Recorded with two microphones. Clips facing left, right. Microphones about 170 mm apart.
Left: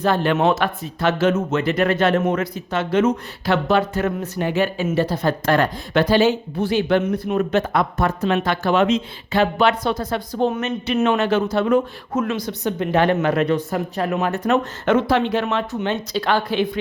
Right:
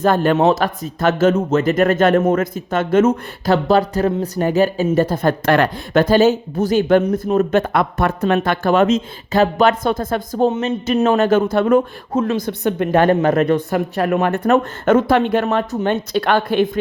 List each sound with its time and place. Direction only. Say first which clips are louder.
0.0 s speech: right 4 dB; 45° right (ahead or behind)
0.3 s speech: right 3 dB; 35° right (ahead or behind); by 5.6 s 60° right (ahead or behind)
5.9 s speech: right 4 dB; 45° right (ahead or behind)
7.6 s speech: right 2 dB; 65° right (ahead or behind)
8.4 s speech: right 3 dB; 50° right (ahead or behind)
10.5 s speech: right 4 dB; 30° right (ahead or behind); by 11.8 s 50° right (ahead or behind)
12.1 s speech: right 4 dB; 30° right (ahead or behind)
12.4 s speech: right 4 dB; 55° right (ahead or behind)
13.7 s speech: right 5 dB; 70° right (ahead or behind); by 16.7 s 50° right (ahead or behind)